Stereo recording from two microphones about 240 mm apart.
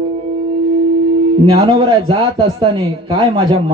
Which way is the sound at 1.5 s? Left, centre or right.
Right.